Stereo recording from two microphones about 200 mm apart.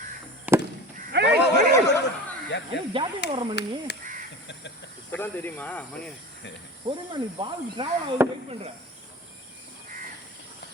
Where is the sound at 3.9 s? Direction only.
55° left (ahead or behind).